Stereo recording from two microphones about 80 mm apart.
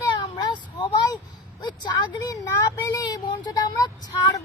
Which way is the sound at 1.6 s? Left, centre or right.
Left.